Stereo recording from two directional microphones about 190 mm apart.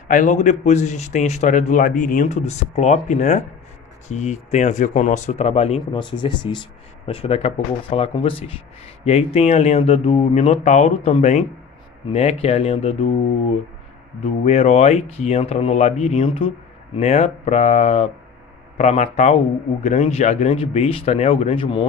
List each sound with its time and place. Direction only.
0.1 s a man's voice: 40° left (ahead or behind)
14.4 s a man's voice: 35° left (ahead or behind)